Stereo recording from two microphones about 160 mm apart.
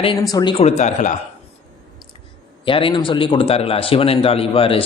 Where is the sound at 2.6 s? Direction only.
30° left (ahead or behind).